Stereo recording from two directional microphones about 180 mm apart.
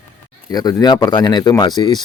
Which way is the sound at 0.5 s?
20° left (ahead or behind).